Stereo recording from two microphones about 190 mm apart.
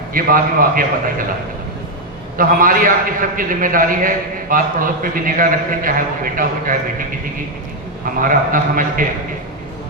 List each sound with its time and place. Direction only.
0.1 s a man's voice: 45° right (ahead or behind)
2.4 s a man's voice: 45° right (ahead or behind)
8.2 s a man's voice: 45° right (ahead or behind)